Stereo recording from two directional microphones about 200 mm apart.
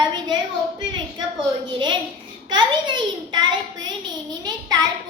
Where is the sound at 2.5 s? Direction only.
20° right (ahead or behind).